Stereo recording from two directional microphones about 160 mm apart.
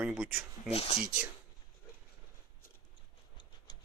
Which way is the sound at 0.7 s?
40° left (ahead or behind).